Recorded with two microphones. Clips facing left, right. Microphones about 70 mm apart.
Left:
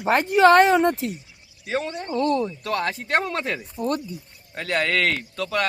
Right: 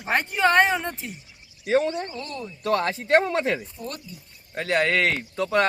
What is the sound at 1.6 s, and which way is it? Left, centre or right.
Speech, right.